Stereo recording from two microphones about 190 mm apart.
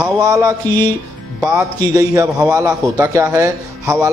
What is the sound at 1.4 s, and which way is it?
Speech, 5° right (ahead or behind).